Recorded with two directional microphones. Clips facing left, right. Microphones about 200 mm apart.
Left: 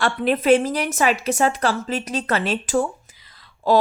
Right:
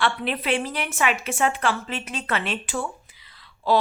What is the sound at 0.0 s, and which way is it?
A woman's voice, 45° left (ahead or behind).